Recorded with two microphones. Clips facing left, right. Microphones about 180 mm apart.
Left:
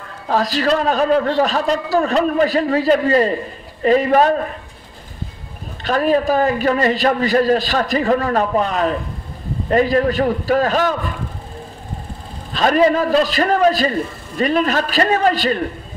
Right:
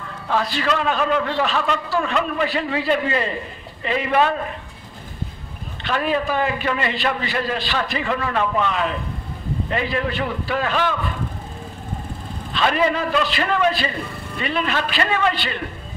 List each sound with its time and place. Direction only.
0.3 s a man's voice: 40° left (ahead or behind)
5.9 s a man's voice: 40° left (ahead or behind)
12.5 s a man's voice: 40° left (ahead or behind)